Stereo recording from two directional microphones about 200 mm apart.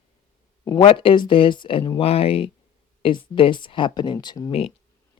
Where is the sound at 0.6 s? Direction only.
15° left (ahead or behind).